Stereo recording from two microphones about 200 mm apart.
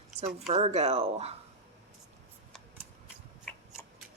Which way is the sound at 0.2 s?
30° right (ahead or behind).